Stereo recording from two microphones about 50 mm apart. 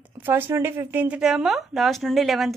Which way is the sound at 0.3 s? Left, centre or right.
Right.